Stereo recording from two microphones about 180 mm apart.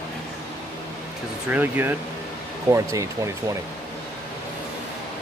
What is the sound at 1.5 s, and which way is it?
Speech, 10° right (ahead or behind).